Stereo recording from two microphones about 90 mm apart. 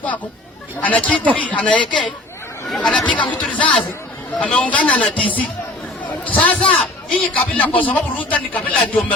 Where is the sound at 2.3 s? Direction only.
30° left (ahead or behind).